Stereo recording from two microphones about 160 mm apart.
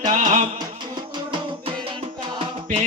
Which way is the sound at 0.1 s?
50° right (ahead or behind).